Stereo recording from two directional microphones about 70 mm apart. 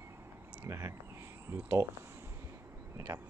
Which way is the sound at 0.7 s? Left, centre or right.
Right.